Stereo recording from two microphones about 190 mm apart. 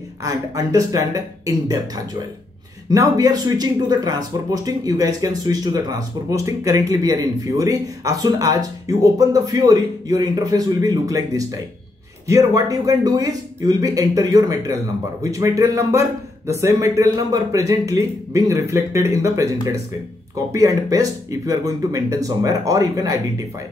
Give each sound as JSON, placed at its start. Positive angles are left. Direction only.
{"t": 0.2, "sound": "speech", "side_deg": -15}
{"t": 2.9, "sound": "speech", "side_deg": -20}